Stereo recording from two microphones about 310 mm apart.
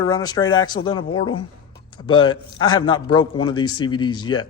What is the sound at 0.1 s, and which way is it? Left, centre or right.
Speech, centre.